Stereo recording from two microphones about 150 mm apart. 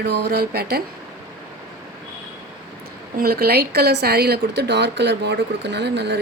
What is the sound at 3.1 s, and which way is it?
A woman's voice, 90° right.